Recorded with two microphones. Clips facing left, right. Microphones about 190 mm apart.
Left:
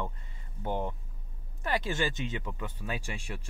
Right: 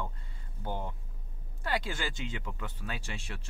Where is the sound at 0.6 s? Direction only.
20° left (ahead or behind).